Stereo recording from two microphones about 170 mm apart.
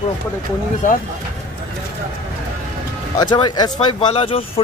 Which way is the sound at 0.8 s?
50° left (ahead or behind).